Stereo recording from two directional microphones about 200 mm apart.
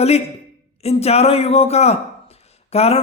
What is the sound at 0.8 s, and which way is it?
A man's voice, 30° left (ahead or behind).